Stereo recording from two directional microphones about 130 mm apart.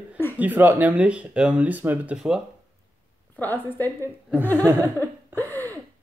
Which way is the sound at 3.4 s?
15° left (ahead or behind).